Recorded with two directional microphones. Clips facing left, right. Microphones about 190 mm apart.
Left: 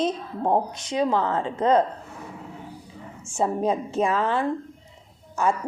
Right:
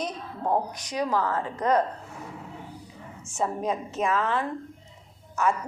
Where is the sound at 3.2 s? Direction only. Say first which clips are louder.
Left 4 dB; 30° left (ahead or behind).